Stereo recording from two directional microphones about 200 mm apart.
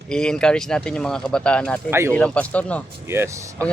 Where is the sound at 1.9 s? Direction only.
15° right (ahead or behind).